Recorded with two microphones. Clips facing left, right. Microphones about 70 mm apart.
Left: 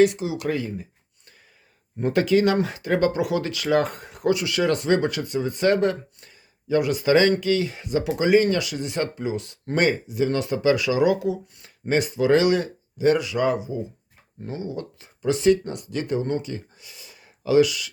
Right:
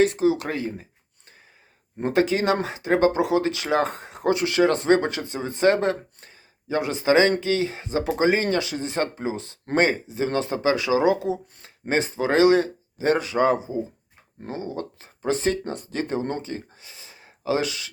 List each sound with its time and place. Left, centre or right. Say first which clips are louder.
0.0 s speech: even; right
2.0 s speech: left 2 dB; right